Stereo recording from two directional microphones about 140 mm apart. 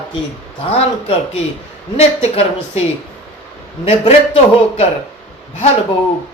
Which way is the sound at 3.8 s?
45° left (ahead or behind).